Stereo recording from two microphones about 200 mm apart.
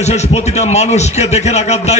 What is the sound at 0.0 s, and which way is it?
A man's voice, 35° left (ahead or behind).